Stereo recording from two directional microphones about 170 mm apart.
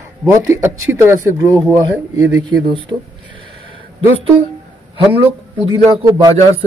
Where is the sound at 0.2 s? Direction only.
15° right (ahead or behind).